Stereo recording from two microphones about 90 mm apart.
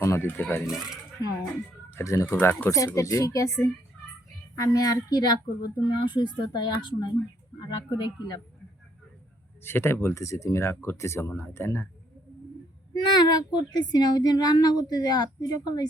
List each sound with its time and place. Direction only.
0.0 s speech: 25° left (ahead or behind)
1.2 s speech: 45° left (ahead or behind)
1.9 s speech: 30° left (ahead or behind)
2.6 s speech: 35° left (ahead or behind); by 8.4 s 55° left (ahead or behind)
9.6 s speech: 25° left (ahead or behind)
13.1 s speech: 55° left (ahead or behind)